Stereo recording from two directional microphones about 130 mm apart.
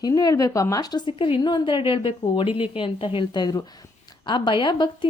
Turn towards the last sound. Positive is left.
turn(degrees=40)  # may be behind; listen again after turning